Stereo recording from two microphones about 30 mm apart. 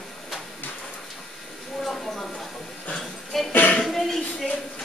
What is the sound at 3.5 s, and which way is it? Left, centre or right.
Music, left.